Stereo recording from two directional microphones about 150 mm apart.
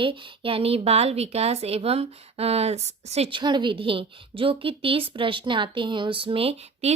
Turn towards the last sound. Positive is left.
turn(degrees=-40)  # may be behind; listen again after turning